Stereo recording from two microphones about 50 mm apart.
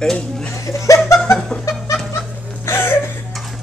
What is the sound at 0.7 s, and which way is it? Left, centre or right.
Chuckle, left.